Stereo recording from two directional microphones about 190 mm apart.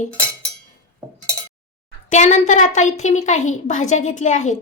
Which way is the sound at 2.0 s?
40° left (ahead or behind).